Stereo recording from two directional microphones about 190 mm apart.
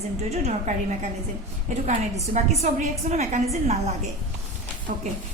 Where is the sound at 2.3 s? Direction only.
35° right (ahead or behind).